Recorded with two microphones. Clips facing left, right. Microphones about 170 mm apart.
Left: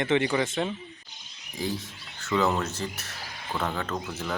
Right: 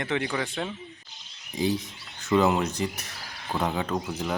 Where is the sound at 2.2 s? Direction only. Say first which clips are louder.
Right 3 dB; 15° right (ahead or behind).